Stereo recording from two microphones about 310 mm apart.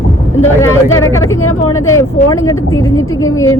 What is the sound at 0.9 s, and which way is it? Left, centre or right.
Speech, centre.